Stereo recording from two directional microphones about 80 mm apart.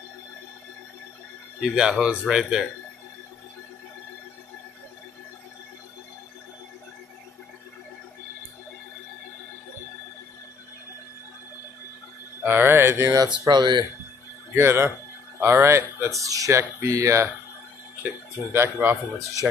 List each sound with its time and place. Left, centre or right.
1.6 s speech: centre
12.4 s mantra: right
13.4 s speech: right
14.5 s speech: right
16.2 s speech: right
18.5 s mantra: right